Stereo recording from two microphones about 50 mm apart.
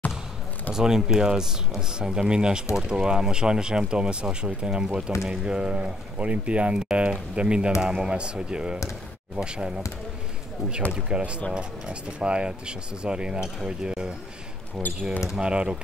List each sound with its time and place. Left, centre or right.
0.7 s speech: centre
10.9 s speech: centre
15.3 s speech: centre